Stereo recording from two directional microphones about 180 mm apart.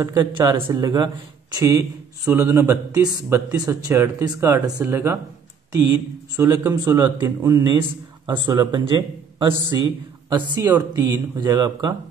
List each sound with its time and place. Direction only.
0.0 s a man's voice: 15° right (ahead or behind)
6.3 s a man's voice: 15° right (ahead or behind)